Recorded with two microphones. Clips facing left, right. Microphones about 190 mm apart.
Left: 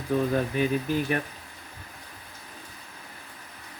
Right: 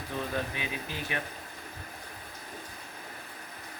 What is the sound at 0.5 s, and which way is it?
Speech, 45° left (ahead or behind).